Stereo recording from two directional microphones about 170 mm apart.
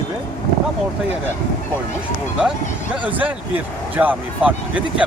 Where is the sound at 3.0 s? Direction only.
10° right (ahead or behind).